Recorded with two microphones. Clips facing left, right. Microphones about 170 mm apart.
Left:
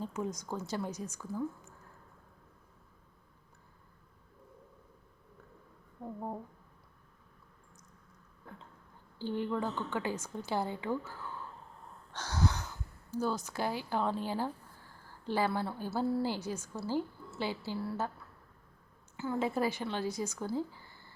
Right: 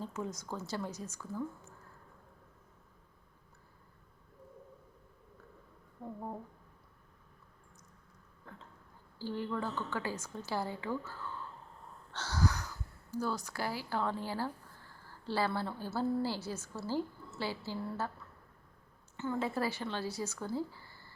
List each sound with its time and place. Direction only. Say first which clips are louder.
0.0 s speech: left 3 dB; 15° left (ahead or behind)
9.1 s a woman's voice: left 3 dB; 20° left (ahead or behind)
19.1 s speech: left 2 dB; 10° left (ahead or behind)